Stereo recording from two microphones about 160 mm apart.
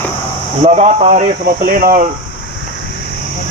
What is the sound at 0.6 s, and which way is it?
Speech, 40° right (ahead or behind).